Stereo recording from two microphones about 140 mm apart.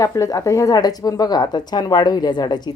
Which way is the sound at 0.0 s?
25° left (ahead or behind).